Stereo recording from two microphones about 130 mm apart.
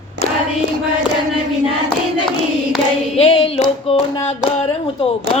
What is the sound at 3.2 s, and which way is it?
Clapping, 50° left (ahead or behind).